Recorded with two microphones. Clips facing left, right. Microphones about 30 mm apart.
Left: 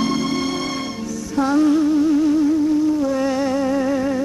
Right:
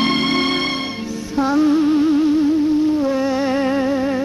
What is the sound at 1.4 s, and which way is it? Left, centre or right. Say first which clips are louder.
Music: right 1 dB; centre.